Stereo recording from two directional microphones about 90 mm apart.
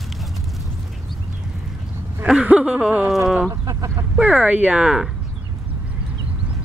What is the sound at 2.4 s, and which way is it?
Speech, 15° right (ahead or behind).